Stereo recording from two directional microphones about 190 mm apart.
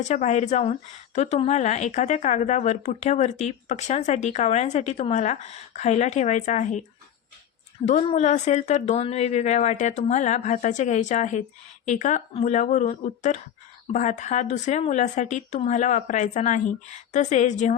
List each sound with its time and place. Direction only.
0.0 s a woman's voice: 40° left (ahead or behind)
7.9 s a woman's voice: 35° left (ahead or behind)